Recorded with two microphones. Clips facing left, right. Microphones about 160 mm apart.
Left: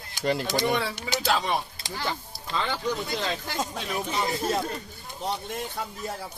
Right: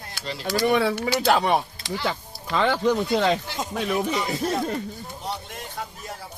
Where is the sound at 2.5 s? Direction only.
90° right.